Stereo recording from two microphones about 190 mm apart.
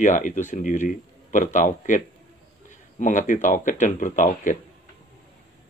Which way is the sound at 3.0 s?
40° left (ahead or behind).